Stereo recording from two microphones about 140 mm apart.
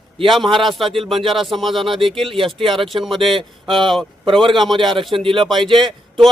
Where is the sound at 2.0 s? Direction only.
40° right (ahead or behind).